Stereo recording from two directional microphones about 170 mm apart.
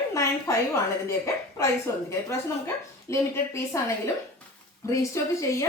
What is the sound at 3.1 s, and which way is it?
Speech, 15° left (ahead or behind).